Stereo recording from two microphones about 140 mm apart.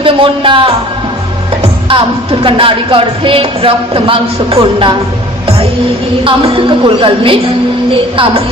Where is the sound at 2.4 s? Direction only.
40° right (ahead or behind).